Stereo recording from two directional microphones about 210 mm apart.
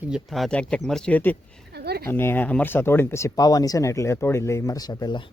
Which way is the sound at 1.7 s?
50° right (ahead or behind).